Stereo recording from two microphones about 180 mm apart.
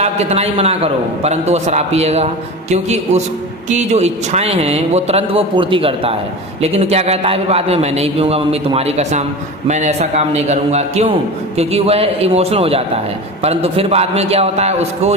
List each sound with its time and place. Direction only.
0.0 s a man's voice: 35° right (ahead or behind)